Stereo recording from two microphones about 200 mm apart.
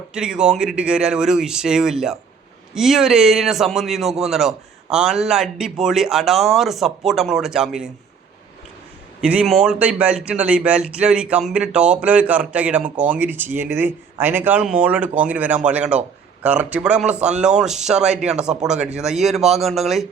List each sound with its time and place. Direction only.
0.1 s a man's voice: 5° right (ahead or behind)
9.2 s a man's voice: 5° right (ahead or behind)